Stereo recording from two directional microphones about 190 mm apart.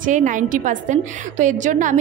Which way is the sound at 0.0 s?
40° right (ahead or behind).